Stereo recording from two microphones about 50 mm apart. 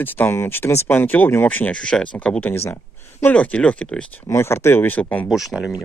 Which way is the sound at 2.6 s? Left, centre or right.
Left.